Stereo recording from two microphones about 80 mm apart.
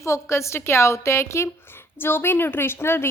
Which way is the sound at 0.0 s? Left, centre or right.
Left.